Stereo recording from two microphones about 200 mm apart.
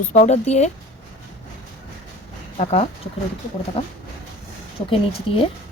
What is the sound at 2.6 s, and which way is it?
Speech, 35° left (ahead or behind).